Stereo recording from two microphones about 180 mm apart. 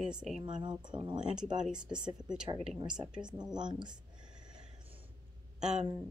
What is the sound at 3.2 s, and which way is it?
Speech, 25° right (ahead or behind).